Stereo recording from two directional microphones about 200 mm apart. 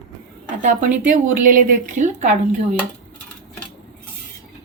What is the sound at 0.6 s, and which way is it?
Speech, 40° right (ahead or behind).